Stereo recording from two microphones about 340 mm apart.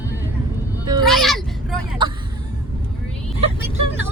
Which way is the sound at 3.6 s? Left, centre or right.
Centre.